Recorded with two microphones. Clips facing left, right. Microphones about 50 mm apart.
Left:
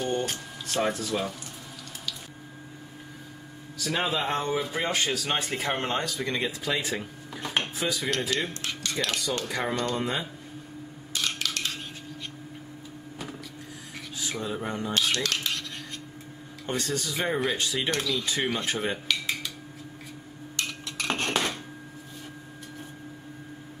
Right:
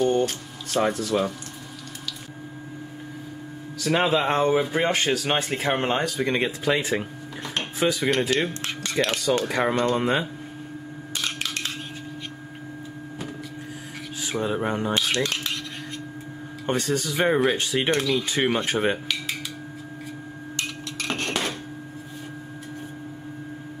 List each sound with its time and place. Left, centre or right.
0.0 s a sound: centre
0.8 s speech: right
3.8 s speech: right
5.5 s speech: right
14.4 s speech: right
15.0 s speech: right
16.6 s speech: right
17.9 s speech: right
21.0 s dishes: centre